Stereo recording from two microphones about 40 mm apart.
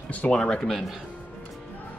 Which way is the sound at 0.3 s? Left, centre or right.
Centre.